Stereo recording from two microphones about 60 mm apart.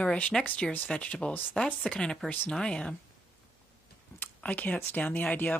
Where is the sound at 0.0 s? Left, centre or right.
Centre.